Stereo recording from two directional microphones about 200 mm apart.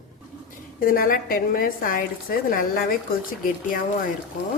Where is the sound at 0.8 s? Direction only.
45° left (ahead or behind).